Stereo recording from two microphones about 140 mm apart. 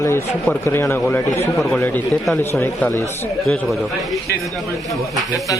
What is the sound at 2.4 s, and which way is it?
Speech, 15° left (ahead or behind).